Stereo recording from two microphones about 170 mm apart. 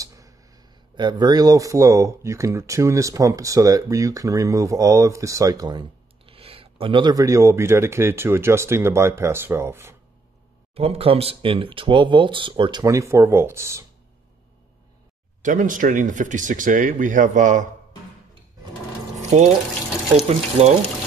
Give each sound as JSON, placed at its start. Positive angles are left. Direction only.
{"t": 0.0, "sound": "speech", "side_deg": -20}
{"t": 10.7, "sound": "speech", "side_deg": -35}
{"t": 15.4, "sound": "speech", "side_deg": -50}
{"t": 19.3, "sound": "speech", "side_deg": -45}